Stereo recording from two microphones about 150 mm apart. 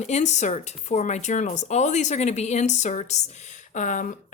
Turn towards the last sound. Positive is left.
turn(degrees=55)  # may be behind; listen again after turning